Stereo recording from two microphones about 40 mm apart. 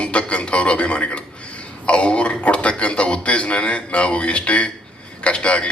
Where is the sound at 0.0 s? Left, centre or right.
Left.